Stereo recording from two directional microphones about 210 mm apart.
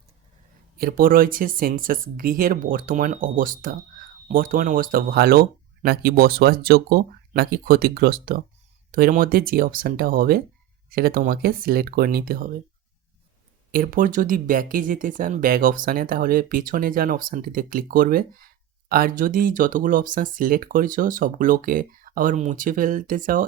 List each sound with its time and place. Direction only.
0.8 s speech: 45° right (ahead or behind)
13.7 s speech: 45° right (ahead or behind)